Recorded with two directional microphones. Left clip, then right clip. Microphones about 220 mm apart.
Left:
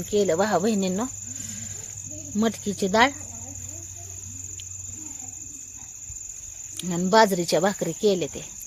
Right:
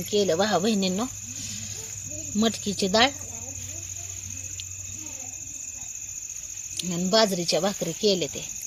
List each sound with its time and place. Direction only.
0.1 s speech: 10° left (ahead or behind)
2.3 s speech: 5° left (ahead or behind)
6.7 s speech: 20° left (ahead or behind)